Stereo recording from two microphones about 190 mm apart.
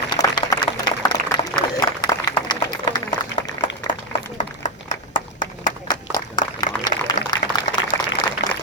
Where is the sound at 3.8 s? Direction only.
35° left (ahead or behind).